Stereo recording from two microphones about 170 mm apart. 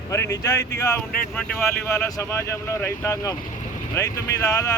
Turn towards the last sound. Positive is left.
turn(degrees=15)  # may be behind; listen again after turning